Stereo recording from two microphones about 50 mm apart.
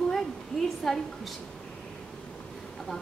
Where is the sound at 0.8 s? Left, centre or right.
Centre.